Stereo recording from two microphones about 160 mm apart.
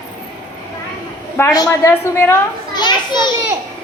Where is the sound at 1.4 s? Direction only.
10° left (ahead or behind).